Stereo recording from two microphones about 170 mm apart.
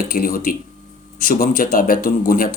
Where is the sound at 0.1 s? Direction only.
60° left (ahead or behind).